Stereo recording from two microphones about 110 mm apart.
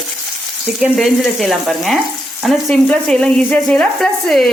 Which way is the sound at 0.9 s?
Centre (ahead or behind).